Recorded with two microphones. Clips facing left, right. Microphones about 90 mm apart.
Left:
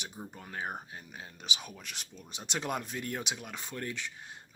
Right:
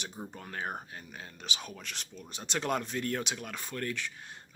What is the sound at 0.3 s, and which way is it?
A man's voice, 10° left (ahead or behind).